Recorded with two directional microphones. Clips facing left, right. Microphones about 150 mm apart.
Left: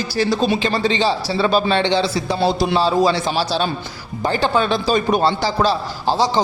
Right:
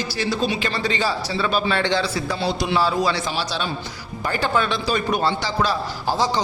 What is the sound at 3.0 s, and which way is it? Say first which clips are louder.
A man's voice: left 5 dB; 30° left (ahead or behind).